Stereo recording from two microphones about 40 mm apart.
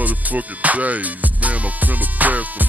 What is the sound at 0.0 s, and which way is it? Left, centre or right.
Music, right.